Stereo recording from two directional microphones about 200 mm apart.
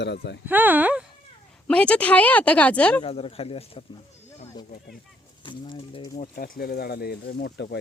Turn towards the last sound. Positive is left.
turn(degrees=60)  # may be behind; listen again after turning